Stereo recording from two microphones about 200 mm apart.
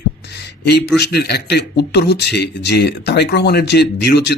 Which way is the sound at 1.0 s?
55° left (ahead or behind).